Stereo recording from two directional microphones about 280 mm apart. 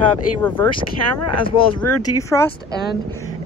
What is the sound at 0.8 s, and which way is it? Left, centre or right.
Speech, left.